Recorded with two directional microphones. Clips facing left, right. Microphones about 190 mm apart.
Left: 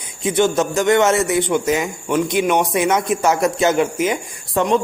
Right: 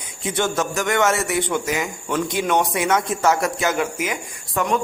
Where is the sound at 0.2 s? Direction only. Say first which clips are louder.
Left 6 dB; 20° left (ahead or behind).